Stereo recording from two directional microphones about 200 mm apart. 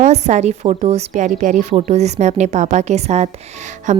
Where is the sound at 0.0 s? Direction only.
35° right (ahead or behind).